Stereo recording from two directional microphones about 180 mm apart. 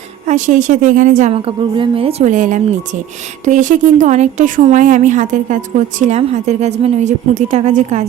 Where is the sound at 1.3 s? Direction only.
30° right (ahead or behind).